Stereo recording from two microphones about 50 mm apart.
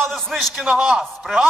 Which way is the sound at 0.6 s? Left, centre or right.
Centre.